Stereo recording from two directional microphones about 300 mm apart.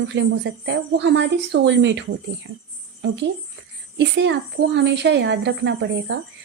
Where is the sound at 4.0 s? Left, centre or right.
Right.